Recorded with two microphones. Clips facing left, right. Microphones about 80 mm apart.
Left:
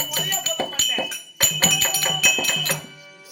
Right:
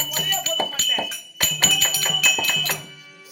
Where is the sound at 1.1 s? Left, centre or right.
Left.